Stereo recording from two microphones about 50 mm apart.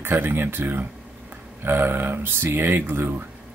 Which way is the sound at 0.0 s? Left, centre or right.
Right.